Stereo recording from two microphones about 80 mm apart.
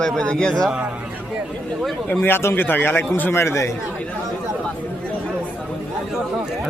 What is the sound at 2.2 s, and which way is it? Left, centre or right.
A man's voice, left.